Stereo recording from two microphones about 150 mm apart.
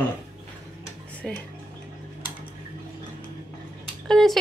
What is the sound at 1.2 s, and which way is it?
Speech, 5° left (ahead or behind).